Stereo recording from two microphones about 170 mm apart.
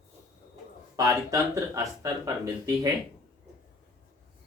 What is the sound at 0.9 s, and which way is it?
Speech, 20° right (ahead or behind).